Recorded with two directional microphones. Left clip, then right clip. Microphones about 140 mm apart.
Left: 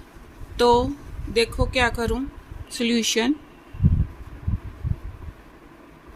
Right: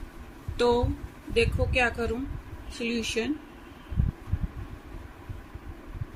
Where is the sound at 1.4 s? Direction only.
50° left (ahead or behind).